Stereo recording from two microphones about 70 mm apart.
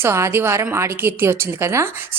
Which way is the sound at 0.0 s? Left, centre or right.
Right.